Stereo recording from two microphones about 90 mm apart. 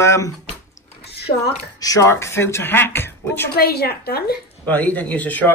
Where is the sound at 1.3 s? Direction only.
85° left.